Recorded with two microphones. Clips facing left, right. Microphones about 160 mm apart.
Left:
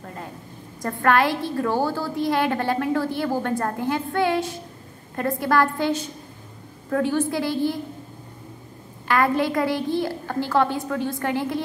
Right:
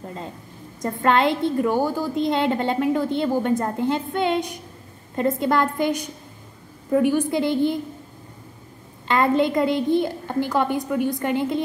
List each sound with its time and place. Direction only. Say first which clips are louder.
0.8 s a woman's voice: right 1 dB; 20° right (ahead or behind)
9.0 s a woman's voice: right 2 dB; 20° right (ahead or behind)